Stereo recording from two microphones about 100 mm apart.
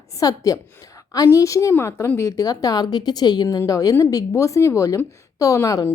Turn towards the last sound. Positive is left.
turn(degrees=35)  # may be behind; listen again after turning